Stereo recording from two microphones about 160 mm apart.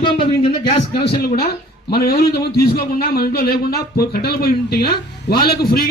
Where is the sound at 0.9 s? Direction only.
90° left.